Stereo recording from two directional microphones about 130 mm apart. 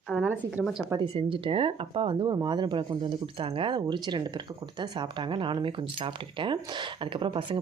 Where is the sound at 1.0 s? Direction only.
40° right (ahead or behind).